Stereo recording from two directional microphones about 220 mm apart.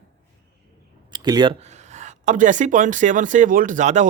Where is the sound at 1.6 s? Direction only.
30° right (ahead or behind).